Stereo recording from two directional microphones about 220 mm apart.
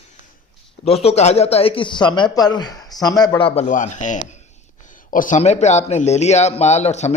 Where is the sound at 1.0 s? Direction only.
30° left (ahead or behind).